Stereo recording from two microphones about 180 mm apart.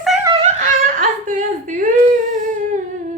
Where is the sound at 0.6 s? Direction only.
45° right (ahead or behind).